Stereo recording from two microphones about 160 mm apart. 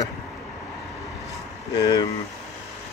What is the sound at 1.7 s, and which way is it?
Speech, 25° left (ahead or behind).